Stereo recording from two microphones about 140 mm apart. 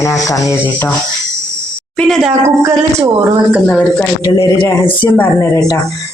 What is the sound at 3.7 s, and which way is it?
Speech, 10° left (ahead or behind).